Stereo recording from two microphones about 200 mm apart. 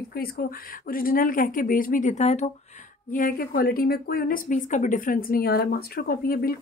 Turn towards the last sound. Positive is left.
turn(degrees=50)  # may be behind; listen again after turning